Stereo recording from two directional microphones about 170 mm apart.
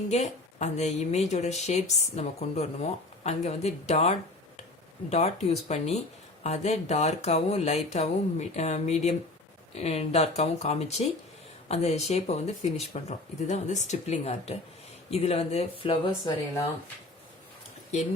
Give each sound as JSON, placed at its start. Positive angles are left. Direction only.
{"t": 0.1, "sound": "a woman's voice", "side_deg": 40}